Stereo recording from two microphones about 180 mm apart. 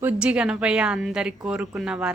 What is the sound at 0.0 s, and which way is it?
A woman's voice, 10° right (ahead or behind).